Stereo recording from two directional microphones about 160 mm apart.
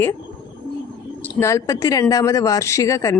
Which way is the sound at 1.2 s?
15° left (ahead or behind).